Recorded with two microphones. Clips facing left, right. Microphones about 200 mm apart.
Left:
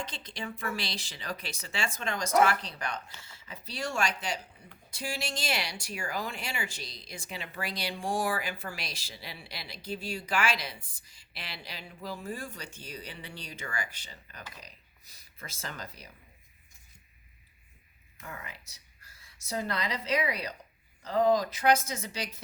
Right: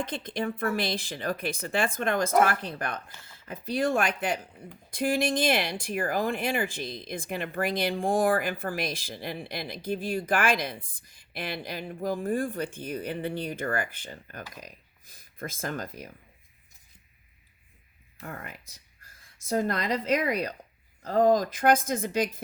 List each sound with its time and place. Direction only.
0.0 s speech: 55° right (ahead or behind)
18.2 s a sound: 55° right (ahead or behind)
19.5 s speech: 50° right (ahead or behind)